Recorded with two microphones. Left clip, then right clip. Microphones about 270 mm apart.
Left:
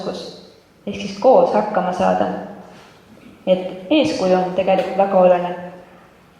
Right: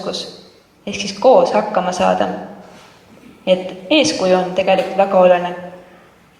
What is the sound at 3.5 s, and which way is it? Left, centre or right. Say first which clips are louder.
A woman's voice: right 2 dB; centre.